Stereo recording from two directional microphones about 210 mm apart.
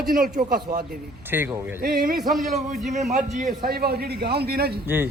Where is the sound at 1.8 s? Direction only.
45° right (ahead or behind).